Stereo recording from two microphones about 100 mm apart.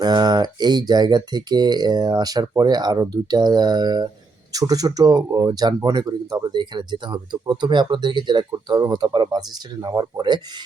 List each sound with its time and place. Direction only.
0.0 s speech: 45° right (ahead or behind)